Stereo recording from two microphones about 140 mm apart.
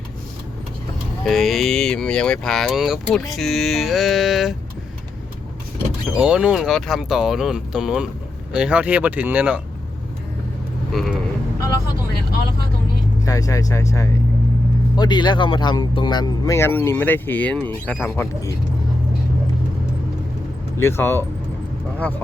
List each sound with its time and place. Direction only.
1.2 s speech: centre (ahead or behind)
6.1 s speech: 5° right (ahead or behind)
10.9 s speech: centre (ahead or behind)
13.2 s speech: 25° left (ahead or behind)
20.7 s speech: 20° left (ahead or behind)